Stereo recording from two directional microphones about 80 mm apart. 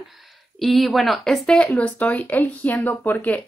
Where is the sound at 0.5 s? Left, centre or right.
Centre.